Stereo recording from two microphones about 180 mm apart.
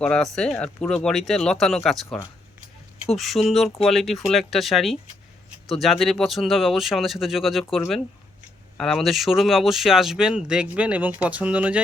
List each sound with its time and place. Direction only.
0.0 s speech: 5° left (ahead or behind)